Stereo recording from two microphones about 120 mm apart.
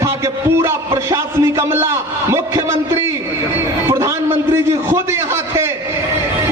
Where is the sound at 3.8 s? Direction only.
25° right (ahead or behind).